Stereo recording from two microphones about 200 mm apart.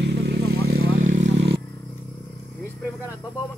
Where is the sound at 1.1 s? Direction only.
35° right (ahead or behind).